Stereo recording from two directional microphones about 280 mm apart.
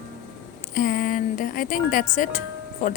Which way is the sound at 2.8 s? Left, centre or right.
Left.